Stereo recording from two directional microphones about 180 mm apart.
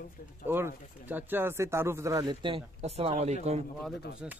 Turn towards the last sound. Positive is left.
turn(degrees=-5)  # may be behind; listen again after turning